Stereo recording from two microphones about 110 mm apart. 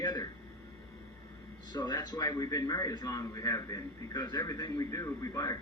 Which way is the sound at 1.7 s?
40° left (ahead or behind).